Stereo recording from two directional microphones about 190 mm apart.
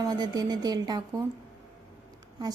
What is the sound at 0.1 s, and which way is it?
Speech, 20° right (ahead or behind).